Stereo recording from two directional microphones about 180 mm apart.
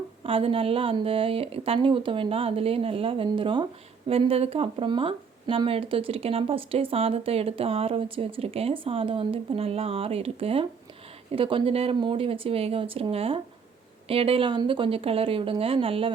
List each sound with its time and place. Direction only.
0.2 s speech: 30° right (ahead or behind)